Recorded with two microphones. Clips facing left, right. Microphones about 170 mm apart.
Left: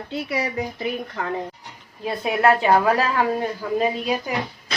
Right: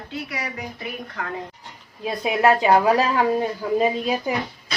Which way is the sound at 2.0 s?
15° right (ahead or behind).